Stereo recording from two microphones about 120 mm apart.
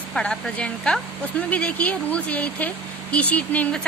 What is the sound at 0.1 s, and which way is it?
Speech, 5° left (ahead or behind).